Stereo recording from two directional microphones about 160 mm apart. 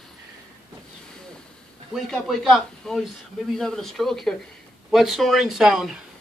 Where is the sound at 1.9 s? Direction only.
Centre (ahead or behind).